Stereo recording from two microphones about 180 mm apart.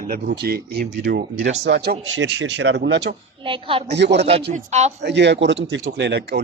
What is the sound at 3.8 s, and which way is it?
Speech, 70° right (ahead or behind).